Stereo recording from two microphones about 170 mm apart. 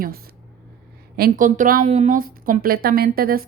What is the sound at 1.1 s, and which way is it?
A woman's voice, 55° right (ahead or behind).